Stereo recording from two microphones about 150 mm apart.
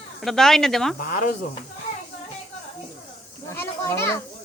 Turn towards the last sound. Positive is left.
turn(degrees=15)  # may be behind; listen again after turning